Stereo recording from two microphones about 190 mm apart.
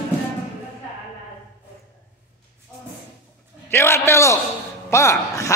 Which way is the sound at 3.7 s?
15° left (ahead or behind).